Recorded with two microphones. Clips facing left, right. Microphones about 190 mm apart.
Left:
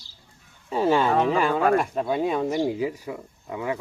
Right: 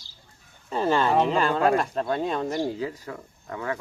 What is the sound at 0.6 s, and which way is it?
Speech, 10° left (ahead or behind).